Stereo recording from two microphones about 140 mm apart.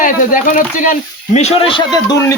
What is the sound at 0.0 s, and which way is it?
Speech, 70° left (ahead or behind).